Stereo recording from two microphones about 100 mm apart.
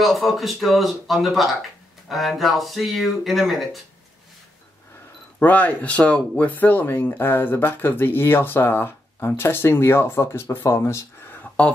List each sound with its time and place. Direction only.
0.0 s speech: centre (ahead or behind)
5.4 s speech: 15° left (ahead or behind)